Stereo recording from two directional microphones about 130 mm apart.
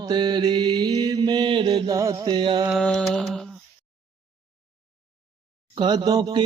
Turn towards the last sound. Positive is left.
turn(degrees=-30)  # may be behind; listen again after turning